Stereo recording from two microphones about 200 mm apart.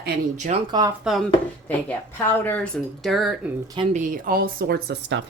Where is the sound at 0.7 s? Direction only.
20° right (ahead or behind).